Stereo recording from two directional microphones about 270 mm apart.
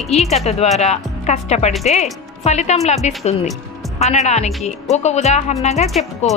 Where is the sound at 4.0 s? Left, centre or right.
Left.